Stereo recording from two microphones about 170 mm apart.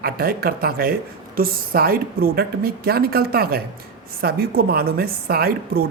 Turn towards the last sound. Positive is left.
turn(degrees=-65)  # may be behind; listen again after turning